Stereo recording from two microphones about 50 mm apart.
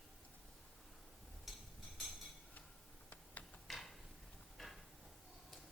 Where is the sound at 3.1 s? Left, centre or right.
Left.